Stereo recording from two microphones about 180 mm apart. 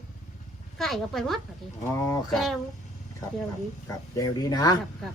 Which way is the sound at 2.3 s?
Centre (ahead or behind).